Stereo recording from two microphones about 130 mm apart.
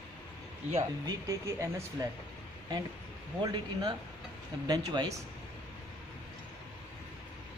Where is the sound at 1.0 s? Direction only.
25° right (ahead or behind).